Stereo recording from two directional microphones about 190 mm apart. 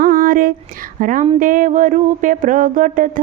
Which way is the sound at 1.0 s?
45° right (ahead or behind).